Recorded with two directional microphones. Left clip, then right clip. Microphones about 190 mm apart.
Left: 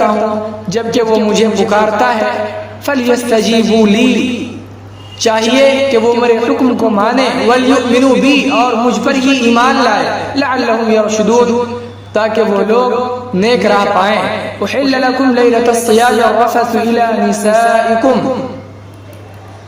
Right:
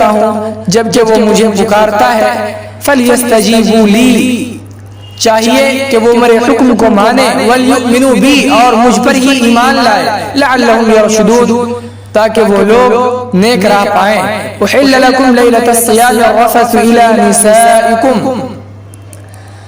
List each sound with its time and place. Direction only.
0.0 s a man's voice: 50° right (ahead or behind)